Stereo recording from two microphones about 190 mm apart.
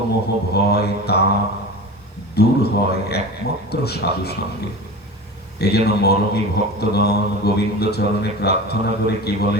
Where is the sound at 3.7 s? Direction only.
60° left (ahead or behind).